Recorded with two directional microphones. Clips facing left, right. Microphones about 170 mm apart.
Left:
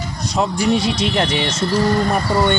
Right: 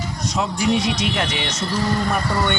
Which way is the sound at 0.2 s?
35° left (ahead or behind).